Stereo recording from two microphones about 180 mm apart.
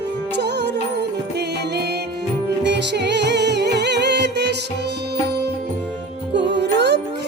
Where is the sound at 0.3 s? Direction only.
65° right (ahead or behind).